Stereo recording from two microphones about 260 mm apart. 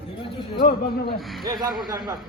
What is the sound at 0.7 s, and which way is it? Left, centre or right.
Speech, left.